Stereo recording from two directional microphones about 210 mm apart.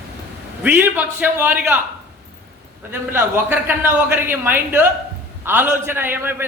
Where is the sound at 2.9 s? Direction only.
10° right (ahead or behind).